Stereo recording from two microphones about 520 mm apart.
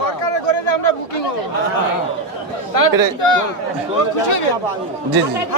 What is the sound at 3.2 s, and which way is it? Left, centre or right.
Speech, left.